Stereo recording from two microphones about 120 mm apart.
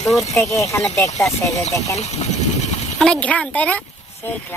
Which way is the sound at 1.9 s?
70° left (ahead or behind).